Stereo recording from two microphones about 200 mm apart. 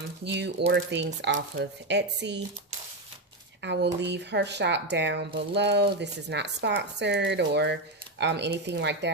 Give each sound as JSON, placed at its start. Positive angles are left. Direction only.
{"t": 0.3, "sound": "speech", "side_deg": -60}
{"t": 3.6, "sound": "speech", "side_deg": -60}